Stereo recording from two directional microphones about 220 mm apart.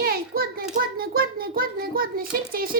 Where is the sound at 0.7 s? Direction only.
40° right (ahead or behind).